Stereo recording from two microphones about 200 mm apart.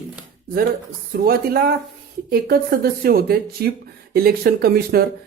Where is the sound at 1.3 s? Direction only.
50° right (ahead or behind).